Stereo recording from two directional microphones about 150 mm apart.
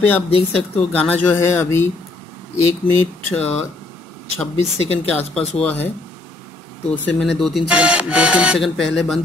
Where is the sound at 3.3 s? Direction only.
10° left (ahead or behind).